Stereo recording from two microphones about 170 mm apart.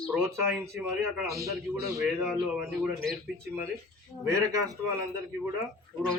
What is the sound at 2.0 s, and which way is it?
Speech, centre (ahead or behind).